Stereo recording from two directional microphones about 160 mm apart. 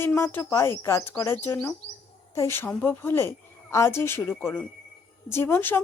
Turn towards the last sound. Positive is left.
turn(degrees=15)  # may be behind; listen again after turning